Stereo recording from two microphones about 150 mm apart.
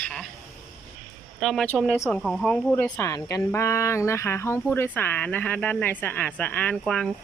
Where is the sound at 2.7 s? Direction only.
15° left (ahead or behind).